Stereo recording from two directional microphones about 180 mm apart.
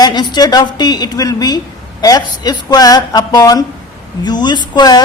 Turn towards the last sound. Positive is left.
turn(degrees=25)  # may be behind; listen again after turning